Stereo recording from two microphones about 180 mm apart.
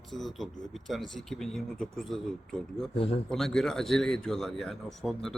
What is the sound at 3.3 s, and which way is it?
Speech, 5° left (ahead or behind).